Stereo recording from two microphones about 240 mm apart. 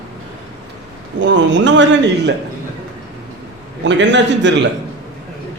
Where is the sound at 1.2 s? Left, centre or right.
Right.